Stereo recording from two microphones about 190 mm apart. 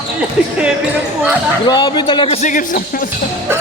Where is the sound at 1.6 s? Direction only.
25° left (ahead or behind); by 2.8 s 40° left (ahead or behind).